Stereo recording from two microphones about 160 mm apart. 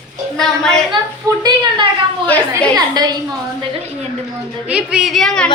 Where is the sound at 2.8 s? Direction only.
25° right (ahead or behind).